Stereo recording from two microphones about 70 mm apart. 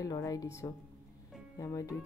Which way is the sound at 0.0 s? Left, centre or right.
Left.